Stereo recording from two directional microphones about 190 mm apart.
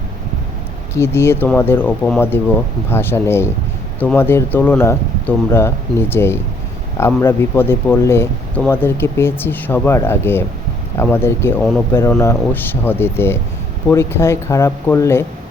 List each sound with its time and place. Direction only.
0.9 s speech: 15° left (ahead or behind)